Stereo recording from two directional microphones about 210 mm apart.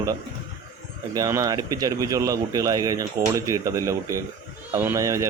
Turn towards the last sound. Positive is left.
turn(degrees=-15)  # may be behind; listen again after turning